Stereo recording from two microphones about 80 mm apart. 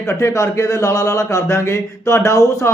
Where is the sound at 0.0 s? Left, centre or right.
Left.